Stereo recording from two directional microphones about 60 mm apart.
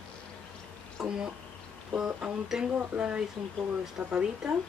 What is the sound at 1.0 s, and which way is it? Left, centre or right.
Speech, centre.